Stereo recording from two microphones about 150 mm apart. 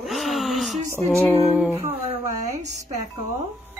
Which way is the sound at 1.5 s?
10° right (ahead or behind).